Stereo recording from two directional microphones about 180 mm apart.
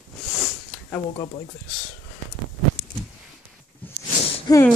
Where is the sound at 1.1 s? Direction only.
25° left (ahead or behind).